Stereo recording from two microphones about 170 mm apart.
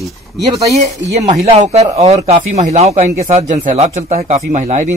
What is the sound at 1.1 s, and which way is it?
A man's voice, 40° right (ahead or behind).